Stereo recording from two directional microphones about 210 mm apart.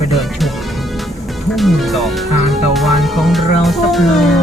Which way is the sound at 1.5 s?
Centre (ahead or behind).